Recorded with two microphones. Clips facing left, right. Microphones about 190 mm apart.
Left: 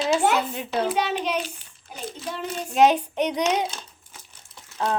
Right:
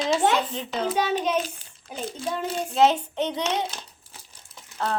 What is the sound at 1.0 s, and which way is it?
Child singing, 45° right (ahead or behind).